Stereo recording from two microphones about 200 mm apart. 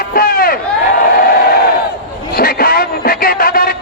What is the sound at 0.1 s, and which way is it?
Crowd, 45° left (ahead or behind).